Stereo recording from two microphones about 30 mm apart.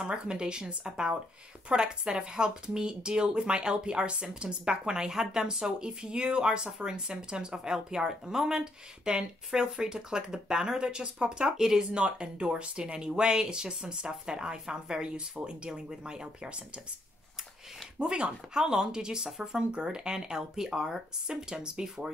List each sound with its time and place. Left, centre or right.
0.0 s speech: right
11.8 s speech: right
16.4 s speech: right
18.5 s speech: right